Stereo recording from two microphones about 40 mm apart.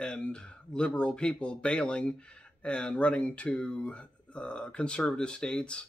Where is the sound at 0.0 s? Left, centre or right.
Left.